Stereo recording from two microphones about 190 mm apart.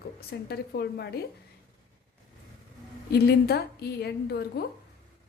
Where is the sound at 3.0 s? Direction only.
60° left (ahead or behind).